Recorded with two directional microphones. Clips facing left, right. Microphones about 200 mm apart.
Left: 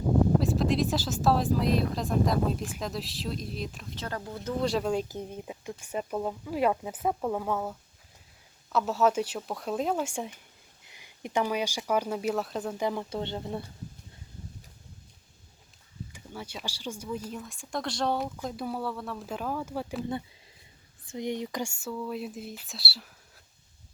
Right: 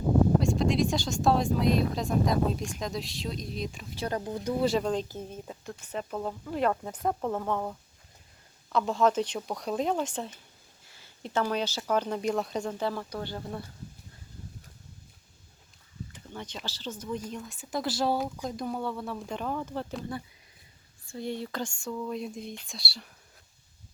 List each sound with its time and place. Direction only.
0.3 s speech: centre (ahead or behind)
3.9 s speech: 15° right (ahead or behind)
4.6 s speech: centre (ahead or behind)
12.8 s speech: 15° left (ahead or behind)
16.1 s speech: 10° left (ahead or behind)
21.1 s speech: 15° left (ahead or behind)